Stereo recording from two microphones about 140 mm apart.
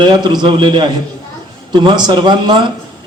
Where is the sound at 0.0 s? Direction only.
35° right (ahead or behind).